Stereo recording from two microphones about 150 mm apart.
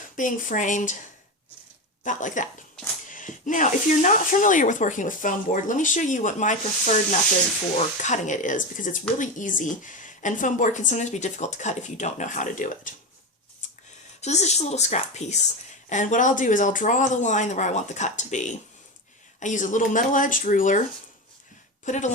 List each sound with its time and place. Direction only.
0.2 s speech: 60° left (ahead or behind)
2.0 s speech: 55° left (ahead or behind)
8.0 s speech: 55° left (ahead or behind)
13.6 s a sound: 55° left (ahead or behind)
14.2 s a woman's voice: 50° left (ahead or behind)
21.8 s a woman's voice: 50° left (ahead or behind)